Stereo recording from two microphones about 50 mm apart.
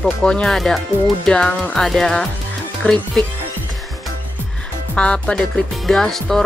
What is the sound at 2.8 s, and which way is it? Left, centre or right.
Speech, left.